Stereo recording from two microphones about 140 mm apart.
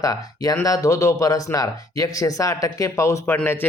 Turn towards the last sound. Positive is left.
turn(degrees=15)  # may be behind; listen again after turning